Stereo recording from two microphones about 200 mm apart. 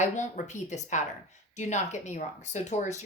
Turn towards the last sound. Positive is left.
turn(degrees=35)  # may be behind; listen again after turning